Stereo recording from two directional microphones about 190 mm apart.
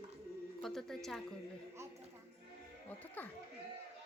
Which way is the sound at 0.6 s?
Centre (ahead or behind).